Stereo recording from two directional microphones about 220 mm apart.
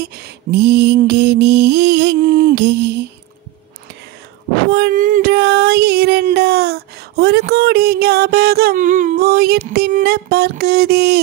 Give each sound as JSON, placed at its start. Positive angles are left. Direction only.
{"t": 0.1, "sound": "mantra", "side_deg": -50}
{"t": 4.6, "sound": "music", "side_deg": -45}